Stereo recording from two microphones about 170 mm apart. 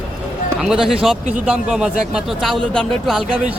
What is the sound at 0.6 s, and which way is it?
Speech, 5° right (ahead or behind).